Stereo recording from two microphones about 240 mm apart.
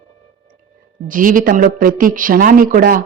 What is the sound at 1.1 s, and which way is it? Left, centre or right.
A woman's voice, right.